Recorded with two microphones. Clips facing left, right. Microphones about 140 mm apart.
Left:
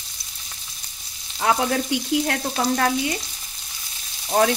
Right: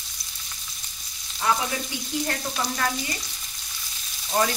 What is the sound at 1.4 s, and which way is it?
Frying, 70° left (ahead or behind).